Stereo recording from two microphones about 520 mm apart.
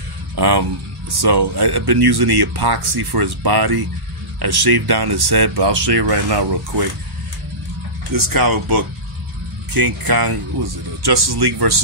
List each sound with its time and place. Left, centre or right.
0.4 s speech: right
8.1 s speech: right